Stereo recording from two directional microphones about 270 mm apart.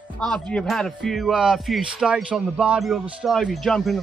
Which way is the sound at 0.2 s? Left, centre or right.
Centre.